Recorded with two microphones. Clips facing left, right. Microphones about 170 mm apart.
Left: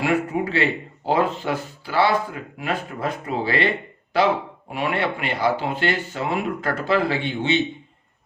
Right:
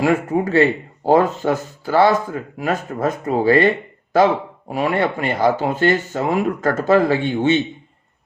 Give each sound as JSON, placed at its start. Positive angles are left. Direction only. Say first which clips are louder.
{"t": 0.0, "sound": "speech", "louder": "right 4 dB", "side_deg": -45}